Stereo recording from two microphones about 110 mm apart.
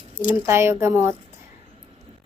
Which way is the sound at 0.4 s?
25° right (ahead or behind).